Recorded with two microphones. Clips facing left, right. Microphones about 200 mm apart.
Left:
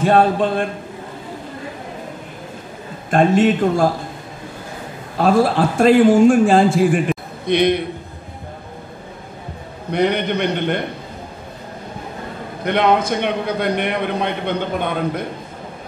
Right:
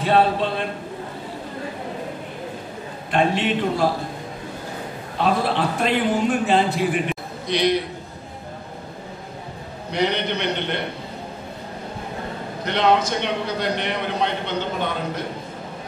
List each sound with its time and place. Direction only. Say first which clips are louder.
0.0 s a man's voice: left 4 dB; 45° left (ahead or behind)
3.1 s a man's voice: left 7 dB; 45° left (ahead or behind)
5.2 s a man's voice: left 6 dB; 45° left (ahead or behind)
9.8 s a man's voice: left 5 dB; 55° left (ahead or behind)
12.6 s a man's voice: left 3 dB; 55° left (ahead or behind)